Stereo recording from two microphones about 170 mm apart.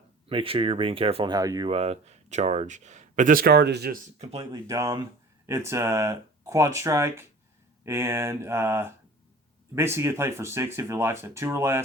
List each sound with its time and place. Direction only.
0.3 s speech: 35° right (ahead or behind); by 3.9 s 75° right (ahead or behind)
4.4 s speech: 20° right (ahead or behind)